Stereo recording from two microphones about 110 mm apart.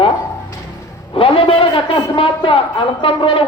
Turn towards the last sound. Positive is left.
turn(degrees=55)  # may be behind; listen again after turning